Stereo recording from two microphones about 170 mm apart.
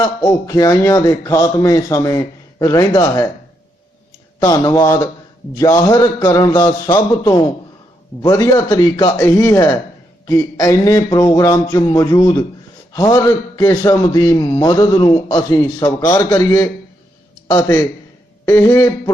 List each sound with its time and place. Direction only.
0.0 s a man's voice: 20° left (ahead or behind)
4.4 s a man's voice: 25° left (ahead or behind)